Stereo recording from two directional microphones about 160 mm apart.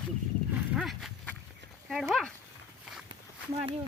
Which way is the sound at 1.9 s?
Centre (ahead or behind).